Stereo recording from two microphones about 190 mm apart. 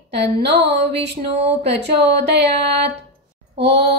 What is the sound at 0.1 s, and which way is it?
Speech, 60° right (ahead or behind).